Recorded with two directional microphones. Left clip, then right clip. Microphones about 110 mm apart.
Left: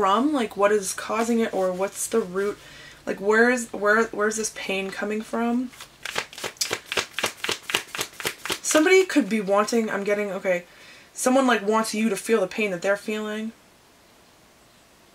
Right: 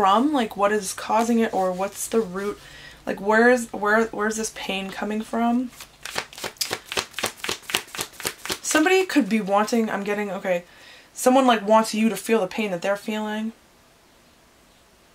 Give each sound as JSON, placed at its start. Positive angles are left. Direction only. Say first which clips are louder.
{"t": 0.0, "sound": "speech", "louder": "right 2 dB", "side_deg": -25}
{"t": 6.0, "sound": "shuffling cards", "louder": "left 1 dB", "side_deg": -15}
{"t": 11.1, "sound": "speech", "louder": "right 3 dB", "side_deg": -25}